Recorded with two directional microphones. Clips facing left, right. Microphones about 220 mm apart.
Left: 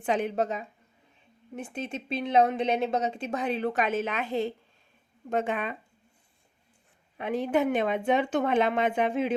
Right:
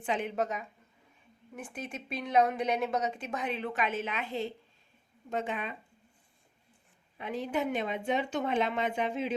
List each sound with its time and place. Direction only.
0.0 s a woman's voice: 40° left (ahead or behind)
5.3 s speech: 55° left (ahead or behind)
7.2 s speech: 55° left (ahead or behind)